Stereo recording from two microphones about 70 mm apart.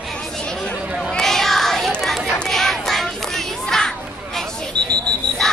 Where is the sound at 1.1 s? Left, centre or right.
Centre.